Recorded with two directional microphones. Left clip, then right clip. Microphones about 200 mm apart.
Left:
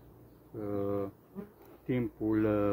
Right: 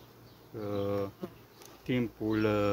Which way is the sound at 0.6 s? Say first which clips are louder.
Right 1 dB; 25° right (ahead or behind).